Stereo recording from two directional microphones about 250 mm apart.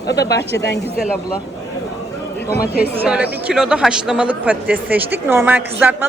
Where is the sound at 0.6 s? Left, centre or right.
Left.